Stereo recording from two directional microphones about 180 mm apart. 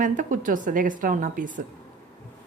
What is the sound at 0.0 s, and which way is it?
Speech, 45° right (ahead or behind).